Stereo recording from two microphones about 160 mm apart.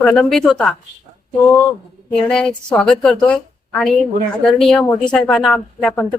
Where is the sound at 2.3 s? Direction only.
5° left (ahead or behind).